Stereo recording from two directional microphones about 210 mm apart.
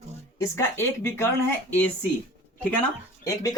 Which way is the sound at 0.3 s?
15° left (ahead or behind).